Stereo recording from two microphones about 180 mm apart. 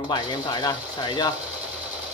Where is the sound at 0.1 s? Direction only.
20° left (ahead or behind).